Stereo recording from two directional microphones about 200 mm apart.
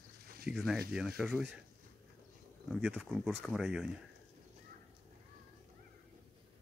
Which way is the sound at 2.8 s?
5° right (ahead or behind).